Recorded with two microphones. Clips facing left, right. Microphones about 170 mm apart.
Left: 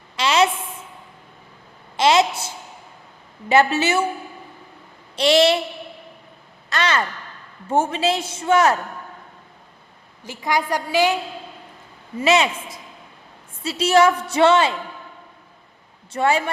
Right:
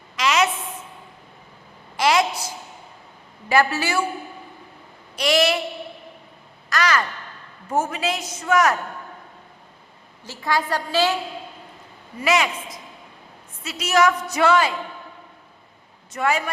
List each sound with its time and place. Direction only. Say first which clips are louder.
0.2 s a sound: left 2 dB; 30° left (ahead or behind)
2.0 s a sound: left 3 dB; 25° left (ahead or behind)
3.5 s a woman's voice: left 3 dB; 25° left (ahead or behind)
5.1 s a woman's voice: left 4 dB; 25° left (ahead or behind)
6.7 s a sound: even; 25° left (ahead or behind)
7.7 s a woman's voice: left 4 dB; 30° left (ahead or behind)
10.2 s a woman's voice: left 1 dB; 15° left (ahead or behind)
12.2 s a woman's voice: left 3 dB; 25° left (ahead or behind)
16.1 s a woman's voice: left 3 dB; 30° left (ahead or behind)